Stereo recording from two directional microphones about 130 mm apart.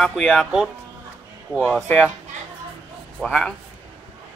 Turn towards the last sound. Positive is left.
turn(degrees=5)  # may be behind; listen again after turning